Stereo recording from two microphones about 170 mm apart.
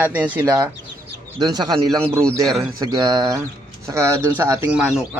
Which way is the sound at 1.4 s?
25° right (ahead or behind).